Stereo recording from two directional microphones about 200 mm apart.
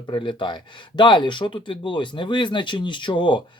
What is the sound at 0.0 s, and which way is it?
Speech, 25° left (ahead or behind).